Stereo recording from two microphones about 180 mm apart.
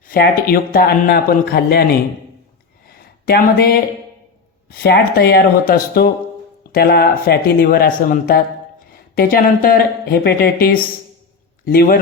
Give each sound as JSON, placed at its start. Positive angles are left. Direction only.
{"t": 0.1, "sound": "speech", "side_deg": 55}
{"t": 2.8, "sound": "a sound", "side_deg": 60}
{"t": 4.7, "sound": "a man's voice", "side_deg": 60}